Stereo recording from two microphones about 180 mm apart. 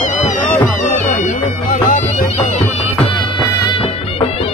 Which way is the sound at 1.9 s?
40° left (ahead or behind).